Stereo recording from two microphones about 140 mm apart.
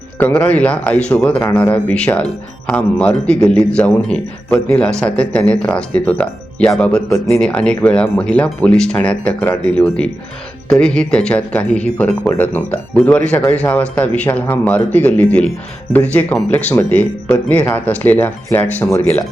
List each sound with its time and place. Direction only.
0.2 s a man's voice: 10° left (ahead or behind)
1.4 s speech: 20° left (ahead or behind)
1.7 s a man's voice: 10° left (ahead or behind)